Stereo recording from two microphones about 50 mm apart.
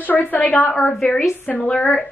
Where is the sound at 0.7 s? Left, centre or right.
Centre.